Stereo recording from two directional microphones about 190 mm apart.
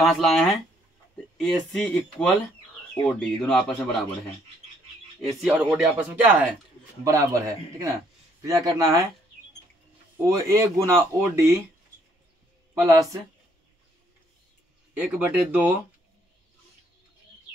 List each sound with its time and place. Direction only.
0.0 s speech: centre (ahead or behind)
5.2 s speech: centre (ahead or behind); by 9.0 s 20° right (ahead or behind)
10.2 s speech: 15° right (ahead or behind)
12.8 s speech: 15° right (ahead or behind)
15.0 s speech: 10° right (ahead or behind)